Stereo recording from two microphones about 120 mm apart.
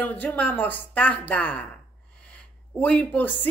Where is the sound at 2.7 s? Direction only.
15° left (ahead or behind).